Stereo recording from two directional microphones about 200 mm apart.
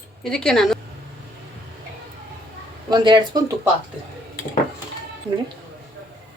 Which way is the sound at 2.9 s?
20° right (ahead or behind).